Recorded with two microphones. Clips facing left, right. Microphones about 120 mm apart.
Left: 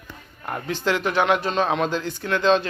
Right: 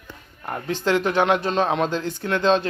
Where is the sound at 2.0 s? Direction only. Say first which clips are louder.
Left 1 dB; 40° right (ahead or behind).